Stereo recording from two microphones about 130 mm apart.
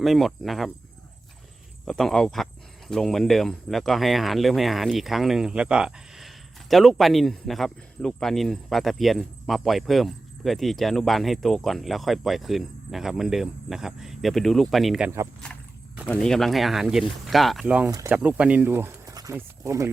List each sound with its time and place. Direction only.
0.0 s speech: centre (ahead or behind)
1.8 s speech: centre (ahead or behind)
17.8 s speech: 20° right (ahead or behind)
18.1 s speech: 10° right (ahead or behind)
19.1 s a sound: 25° right (ahead or behind)